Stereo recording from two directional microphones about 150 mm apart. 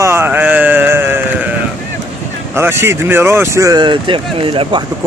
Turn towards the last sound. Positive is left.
turn(degrees=-35)  # may be behind; listen again after turning